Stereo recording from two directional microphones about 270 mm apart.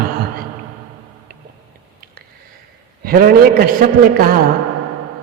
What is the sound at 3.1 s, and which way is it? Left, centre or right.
A man's voice, right.